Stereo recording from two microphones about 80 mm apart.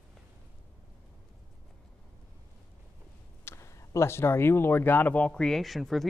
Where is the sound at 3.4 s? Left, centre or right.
Left.